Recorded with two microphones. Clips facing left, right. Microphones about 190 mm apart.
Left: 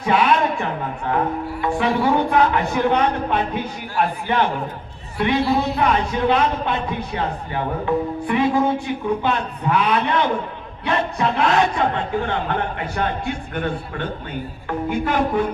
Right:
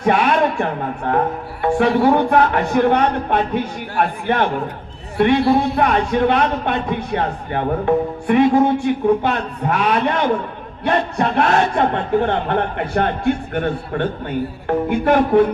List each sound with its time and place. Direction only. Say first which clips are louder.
0.0 s a man's voice: right 2 dB; 50° right (ahead or behind)